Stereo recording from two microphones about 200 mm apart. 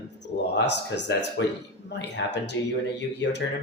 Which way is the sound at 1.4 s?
65° left (ahead or behind).